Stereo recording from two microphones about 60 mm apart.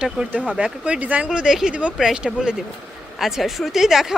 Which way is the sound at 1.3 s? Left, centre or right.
Centre.